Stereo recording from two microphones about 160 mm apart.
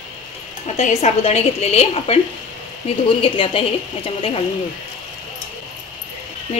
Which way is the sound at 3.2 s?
35° left (ahead or behind).